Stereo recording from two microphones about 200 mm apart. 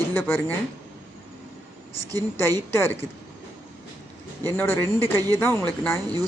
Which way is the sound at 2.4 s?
10° left (ahead or behind).